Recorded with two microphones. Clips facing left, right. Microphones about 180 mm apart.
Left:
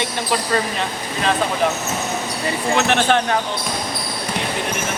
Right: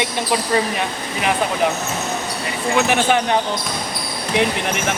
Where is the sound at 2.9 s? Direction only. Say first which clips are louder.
Left 1 dB; 10° right (ahead or behind).